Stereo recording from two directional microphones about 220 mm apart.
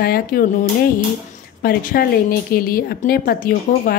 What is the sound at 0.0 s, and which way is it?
A woman's voice, 40° left (ahead or behind).